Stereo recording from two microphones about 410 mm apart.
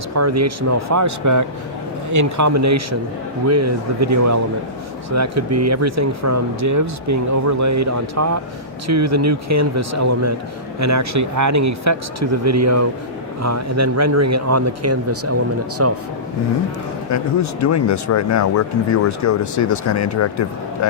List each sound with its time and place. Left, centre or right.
0.1 s speech: right
17.1 s speech: left